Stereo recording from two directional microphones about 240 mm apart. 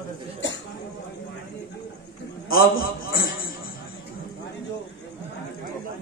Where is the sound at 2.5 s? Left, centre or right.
Left.